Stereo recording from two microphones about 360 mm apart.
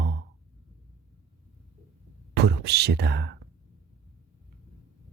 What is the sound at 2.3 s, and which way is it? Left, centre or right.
Speech, right.